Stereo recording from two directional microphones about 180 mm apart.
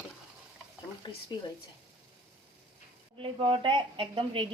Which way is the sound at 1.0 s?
25° left (ahead or behind).